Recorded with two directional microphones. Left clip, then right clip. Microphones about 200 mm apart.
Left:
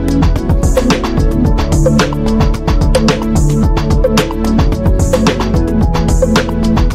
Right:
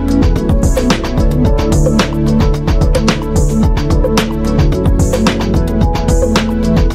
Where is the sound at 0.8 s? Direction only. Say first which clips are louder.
Left 1 dB; centre (ahead or behind).